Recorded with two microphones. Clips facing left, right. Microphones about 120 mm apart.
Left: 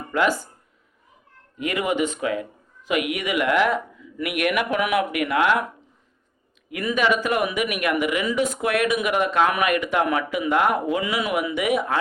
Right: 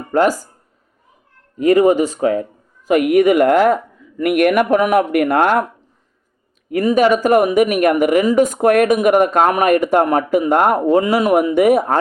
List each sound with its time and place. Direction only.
0.1 s speech: 40° right (ahead or behind)
1.5 s speech: 40° right (ahead or behind)
6.7 s speech: 40° right (ahead or behind)